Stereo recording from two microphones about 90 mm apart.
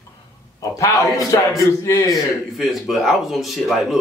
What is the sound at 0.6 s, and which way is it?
A man's voice, 40° left (ahead or behind).